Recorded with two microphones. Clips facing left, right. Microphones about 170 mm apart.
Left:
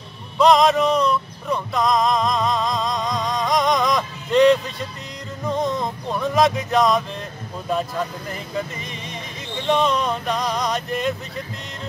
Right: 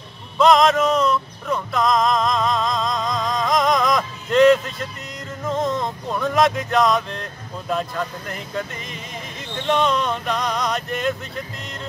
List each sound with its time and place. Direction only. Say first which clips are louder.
0.4 s music: even; centre (ahead or behind)
9.7 s music: even; centre (ahead or behind)